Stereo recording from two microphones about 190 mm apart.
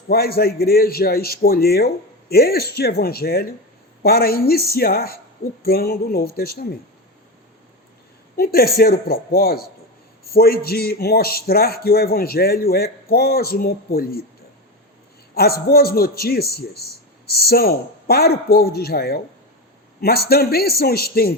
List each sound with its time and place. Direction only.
0.1 s speech: 55° left (ahead or behind)
8.4 s speech: 55° left (ahead or behind)
15.4 s speech: 55° left (ahead or behind)